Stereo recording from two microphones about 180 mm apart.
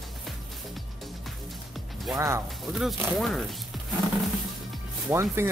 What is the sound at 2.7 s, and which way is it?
Speech, 5° right (ahead or behind).